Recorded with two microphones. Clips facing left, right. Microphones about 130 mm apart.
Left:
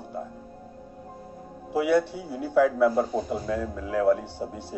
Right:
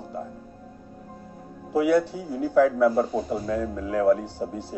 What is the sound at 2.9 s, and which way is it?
Speech, centre (ahead or behind).